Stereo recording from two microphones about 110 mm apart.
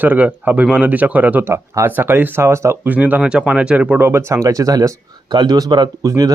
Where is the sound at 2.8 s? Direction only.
15° right (ahead or behind).